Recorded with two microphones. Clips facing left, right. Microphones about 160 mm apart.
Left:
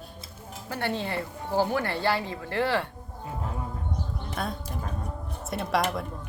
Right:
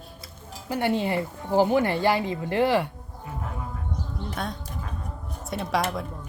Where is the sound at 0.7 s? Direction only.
15° right (ahead or behind).